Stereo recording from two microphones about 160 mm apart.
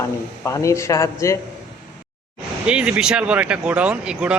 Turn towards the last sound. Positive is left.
turn(degrees=-5)  # may be behind; listen again after turning